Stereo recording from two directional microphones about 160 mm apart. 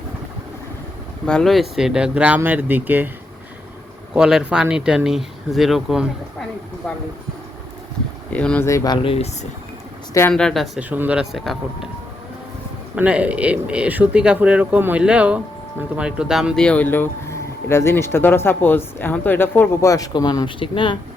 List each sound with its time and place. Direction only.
1.3 s speech: 5° left (ahead or behind)
4.1 s speech: 5° right (ahead or behind)
8.3 s speech: 10° left (ahead or behind)
9.0 s speech: 40° left (ahead or behind)
10.3 s speech: 5° left (ahead or behind)
10.8 s speech: 10° right (ahead or behind)
13.0 s speech: 10° right (ahead or behind); by 21.0 s 30° left (ahead or behind)